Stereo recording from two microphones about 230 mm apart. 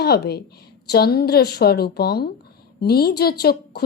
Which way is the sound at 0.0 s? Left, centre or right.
Left.